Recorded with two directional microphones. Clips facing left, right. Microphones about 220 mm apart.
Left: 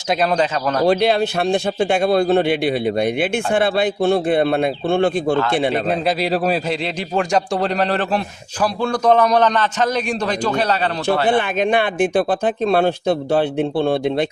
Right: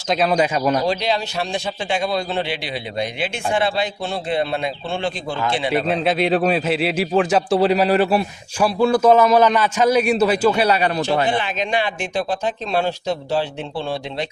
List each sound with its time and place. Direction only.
0.1 s a man's voice: centre (ahead or behind)
0.9 s a man's voice: 55° left (ahead or behind)
5.9 s a man's voice: centre (ahead or behind)
11.3 s a man's voice: 55° left (ahead or behind)